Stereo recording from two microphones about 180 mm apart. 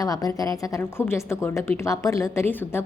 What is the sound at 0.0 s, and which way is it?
A woman's voice, 20° left (ahead or behind).